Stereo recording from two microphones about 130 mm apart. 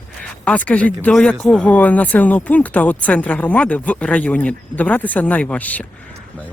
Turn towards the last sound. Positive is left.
turn(degrees=10)  # may be behind; listen again after turning